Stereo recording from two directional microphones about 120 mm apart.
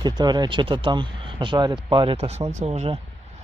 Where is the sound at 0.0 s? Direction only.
35° right (ahead or behind).